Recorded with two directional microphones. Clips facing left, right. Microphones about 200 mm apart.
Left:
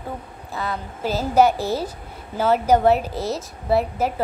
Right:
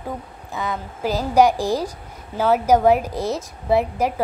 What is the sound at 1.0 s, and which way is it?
A woman's voice, 15° right (ahead or behind).